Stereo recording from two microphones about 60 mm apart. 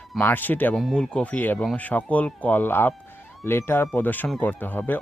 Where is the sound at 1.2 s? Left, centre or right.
Left.